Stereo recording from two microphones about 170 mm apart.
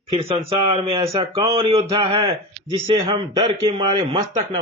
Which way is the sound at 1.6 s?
30° right (ahead or behind).